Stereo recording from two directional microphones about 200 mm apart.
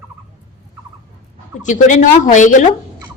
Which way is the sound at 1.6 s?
40° left (ahead or behind).